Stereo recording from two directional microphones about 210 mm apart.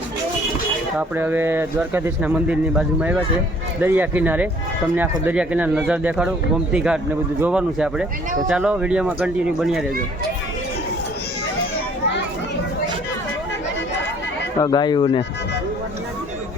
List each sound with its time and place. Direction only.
0.9 s speech: 10° right (ahead or behind)
14.6 s speech: 20° left (ahead or behind)